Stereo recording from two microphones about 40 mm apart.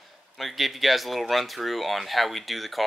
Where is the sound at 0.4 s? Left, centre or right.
Centre.